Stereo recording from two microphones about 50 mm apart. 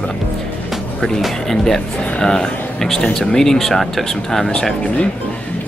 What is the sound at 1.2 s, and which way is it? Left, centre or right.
Speech, centre.